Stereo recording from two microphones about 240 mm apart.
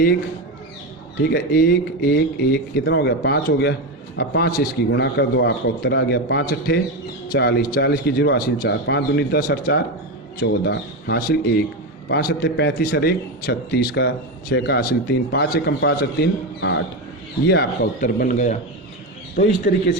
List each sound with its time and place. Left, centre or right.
1.2 s a man's voice: left